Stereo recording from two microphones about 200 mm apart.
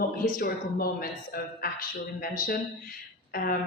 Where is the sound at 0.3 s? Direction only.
45° left (ahead or behind).